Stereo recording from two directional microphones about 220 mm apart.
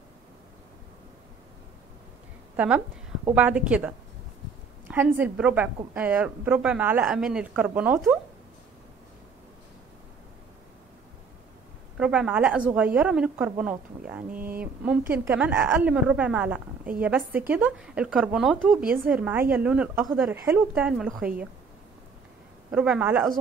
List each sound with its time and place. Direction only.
2.5 s a woman's voice: 5° right (ahead or behind)
4.9 s speech: 10° right (ahead or behind)
12.0 s a woman's voice: 5° right (ahead or behind)
14.3 s speech: 40° right (ahead or behind)
14.6 s a woman's voice: 5° right (ahead or behind)
22.7 s a woman's voice: 5° right (ahead or behind)